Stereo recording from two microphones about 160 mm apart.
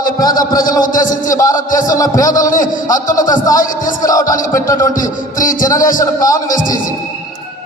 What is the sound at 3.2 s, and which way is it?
Speech, 25° left (ahead or behind).